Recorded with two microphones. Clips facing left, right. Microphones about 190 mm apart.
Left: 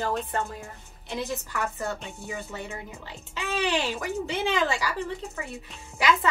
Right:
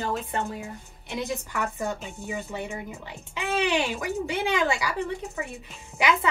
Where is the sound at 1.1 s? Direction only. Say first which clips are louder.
Right 1 dB; 15° right (ahead or behind).